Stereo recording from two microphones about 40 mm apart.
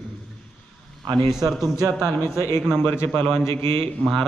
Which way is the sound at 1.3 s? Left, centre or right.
Centre.